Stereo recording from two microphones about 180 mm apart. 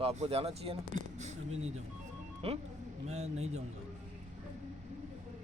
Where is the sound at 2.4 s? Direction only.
35° right (ahead or behind).